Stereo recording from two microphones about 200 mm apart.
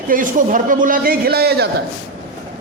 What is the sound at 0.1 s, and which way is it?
A man's voice, 40° right (ahead or behind).